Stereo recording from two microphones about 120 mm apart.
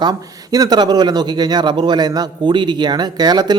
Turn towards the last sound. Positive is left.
turn(degrees=-35)  # may be behind; listen again after turning